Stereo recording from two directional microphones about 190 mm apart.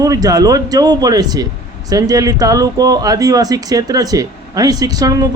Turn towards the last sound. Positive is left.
turn(degrees=-20)  # may be behind; listen again after turning